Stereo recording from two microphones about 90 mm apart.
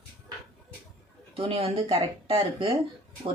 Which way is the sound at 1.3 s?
90° right.